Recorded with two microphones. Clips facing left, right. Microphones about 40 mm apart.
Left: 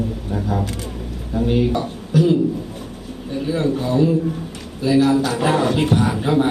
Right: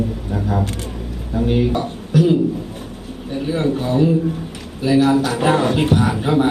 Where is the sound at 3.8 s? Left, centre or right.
Centre.